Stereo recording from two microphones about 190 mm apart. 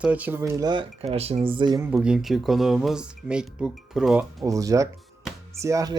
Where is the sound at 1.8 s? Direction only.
5° right (ahead or behind).